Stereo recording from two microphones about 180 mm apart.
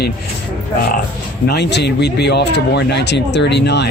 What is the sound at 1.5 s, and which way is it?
Speech, 65° left (ahead or behind).